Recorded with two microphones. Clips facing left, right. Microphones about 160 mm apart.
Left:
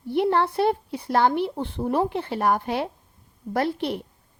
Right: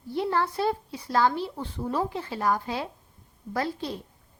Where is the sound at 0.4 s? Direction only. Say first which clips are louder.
Left 5 dB; 60° left (ahead or behind).